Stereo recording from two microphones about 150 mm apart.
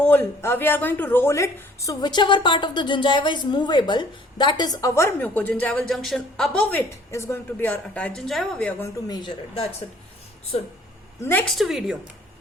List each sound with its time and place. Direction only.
0.0 s speech: 10° left (ahead or behind)
8.8 s a woman's voice: 25° left (ahead or behind)
11.2 s speech: 15° left (ahead or behind)
11.5 s speech: centre (ahead or behind)